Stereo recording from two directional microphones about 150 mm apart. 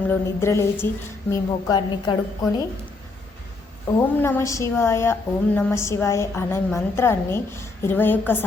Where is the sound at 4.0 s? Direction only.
15° left (ahead or behind).